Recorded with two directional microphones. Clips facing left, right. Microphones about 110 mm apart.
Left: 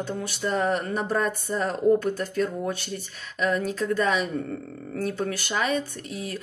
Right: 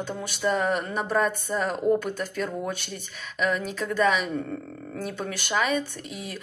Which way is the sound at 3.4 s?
35° left (ahead or behind).